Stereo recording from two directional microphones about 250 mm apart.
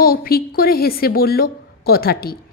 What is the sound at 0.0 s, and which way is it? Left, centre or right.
A woman's voice, left.